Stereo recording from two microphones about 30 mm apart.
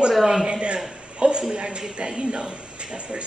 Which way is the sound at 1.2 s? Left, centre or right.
Right.